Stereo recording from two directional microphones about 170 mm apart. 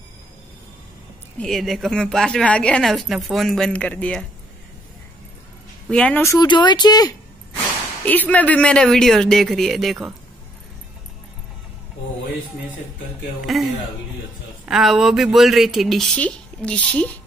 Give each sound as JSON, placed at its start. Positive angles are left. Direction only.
{"t": 1.4, "sound": "a woman's voice", "side_deg": 0}
{"t": 5.9, "sound": "speech", "side_deg": 5}
{"t": 6.4, "sound": "speech", "side_deg": 25}
{"t": 8.0, "sound": "a woman's voice", "side_deg": 10}
{"t": 13.5, "sound": "a woman's voice", "side_deg": 0}
{"t": 14.7, "sound": "a woman's voice", "side_deg": 0}